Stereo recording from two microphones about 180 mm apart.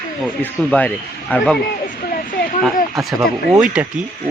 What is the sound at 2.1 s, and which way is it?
Speech, 50° left (ahead or behind).